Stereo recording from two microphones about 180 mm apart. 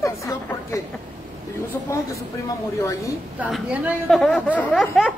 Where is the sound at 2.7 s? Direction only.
15° left (ahead or behind).